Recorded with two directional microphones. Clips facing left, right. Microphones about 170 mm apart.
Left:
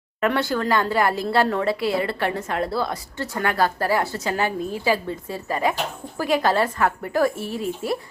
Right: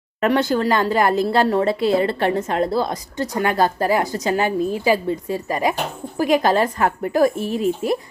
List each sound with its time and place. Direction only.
0.3 s a woman's voice: 20° right (ahead or behind)
1.5 s a woman's voice: 30° right (ahead or behind)